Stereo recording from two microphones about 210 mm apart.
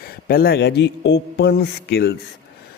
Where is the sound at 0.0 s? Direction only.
45° left (ahead or behind).